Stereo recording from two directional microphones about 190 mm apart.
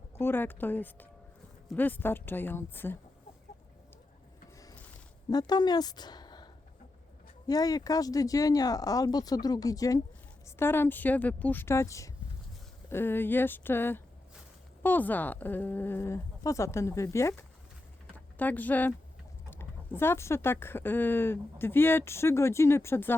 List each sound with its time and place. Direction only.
0.2 s speech: 10° left (ahead or behind)
5.3 s a woman's voice: 20° left (ahead or behind)